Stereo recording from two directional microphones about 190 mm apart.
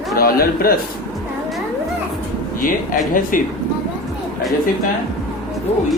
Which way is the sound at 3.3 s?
45° left (ahead or behind).